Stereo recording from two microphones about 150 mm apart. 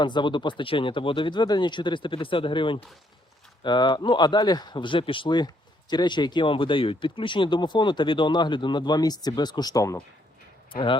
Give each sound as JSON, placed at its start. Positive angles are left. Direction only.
{"t": 0.0, "sound": "speech", "side_deg": 30}
{"t": 10.7, "sound": "speech", "side_deg": 35}